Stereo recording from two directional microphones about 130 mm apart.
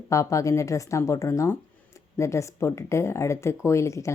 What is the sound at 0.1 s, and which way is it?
Speech, 25° left (ahead or behind).